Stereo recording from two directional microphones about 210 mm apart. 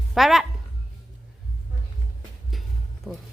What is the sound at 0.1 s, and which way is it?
Speech, centre (ahead or behind).